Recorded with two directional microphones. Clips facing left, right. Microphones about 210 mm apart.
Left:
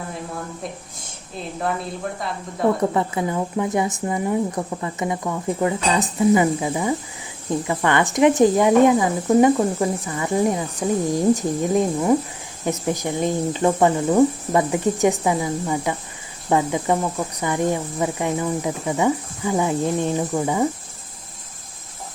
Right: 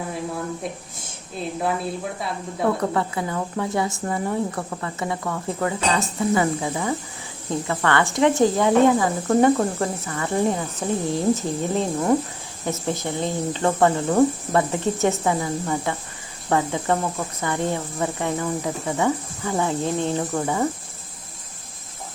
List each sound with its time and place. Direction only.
2.9 s speech: 20° left (ahead or behind)